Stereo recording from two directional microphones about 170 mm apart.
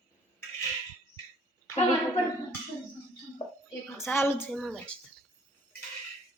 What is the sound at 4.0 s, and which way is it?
Speech, 15° left (ahead or behind).